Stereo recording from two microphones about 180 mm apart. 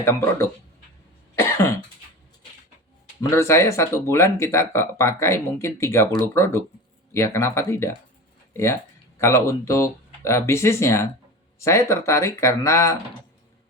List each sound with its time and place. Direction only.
0.0 s speech: 15° left (ahead or behind)
3.2 s speech: 15° left (ahead or behind)